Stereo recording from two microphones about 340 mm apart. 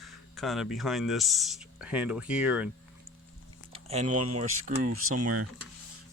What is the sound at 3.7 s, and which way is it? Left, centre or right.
Speech, centre.